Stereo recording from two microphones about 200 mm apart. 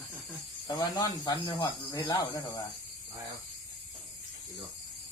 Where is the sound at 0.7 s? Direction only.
20° left (ahead or behind).